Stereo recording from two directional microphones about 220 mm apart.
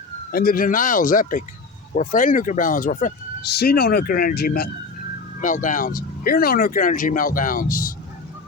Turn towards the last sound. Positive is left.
turn(degrees=40)  # may be behind; listen again after turning